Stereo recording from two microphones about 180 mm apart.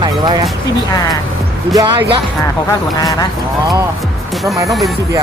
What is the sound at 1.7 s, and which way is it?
Speech, 20° right (ahead or behind).